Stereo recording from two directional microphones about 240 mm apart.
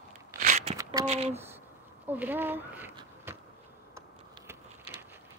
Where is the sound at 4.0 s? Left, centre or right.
Centre.